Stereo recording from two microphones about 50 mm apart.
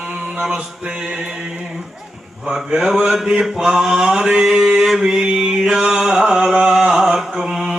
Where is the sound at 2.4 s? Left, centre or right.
Centre.